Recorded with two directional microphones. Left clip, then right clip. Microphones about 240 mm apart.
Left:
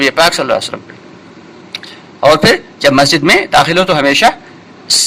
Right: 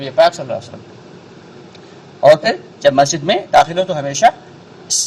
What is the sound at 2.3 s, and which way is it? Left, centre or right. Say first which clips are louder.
A man's voice: left 4 dB; left.